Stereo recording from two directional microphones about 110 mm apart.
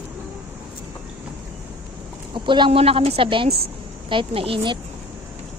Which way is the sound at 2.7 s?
60° right (ahead or behind).